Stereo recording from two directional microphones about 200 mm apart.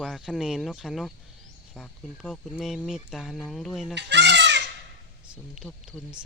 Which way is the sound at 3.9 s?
60° right (ahead or behind).